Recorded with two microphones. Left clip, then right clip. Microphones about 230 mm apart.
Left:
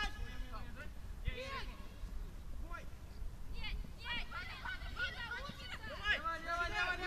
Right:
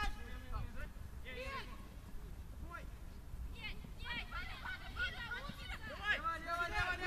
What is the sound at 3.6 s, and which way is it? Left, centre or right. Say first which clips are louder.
Hubbub: left 1 dB; centre.